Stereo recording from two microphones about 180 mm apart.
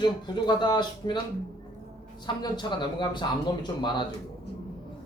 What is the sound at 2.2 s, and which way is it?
Speech, 25° left (ahead or behind).